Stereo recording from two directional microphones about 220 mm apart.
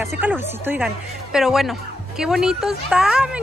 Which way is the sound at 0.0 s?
5° right (ahead or behind).